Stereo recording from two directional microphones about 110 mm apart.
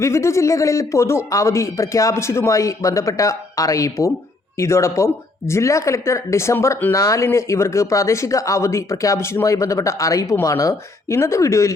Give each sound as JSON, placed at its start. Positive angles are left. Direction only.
{"t": 0.0, "sound": "speech", "side_deg": 25}